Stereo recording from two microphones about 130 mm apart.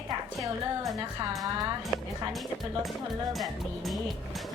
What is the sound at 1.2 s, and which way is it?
Speech, 30° right (ahead or behind).